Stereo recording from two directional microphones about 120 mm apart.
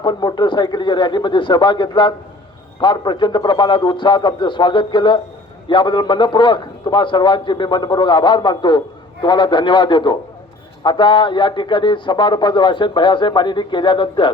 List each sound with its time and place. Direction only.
0.0 s a man's voice: 40° left (ahead or behind)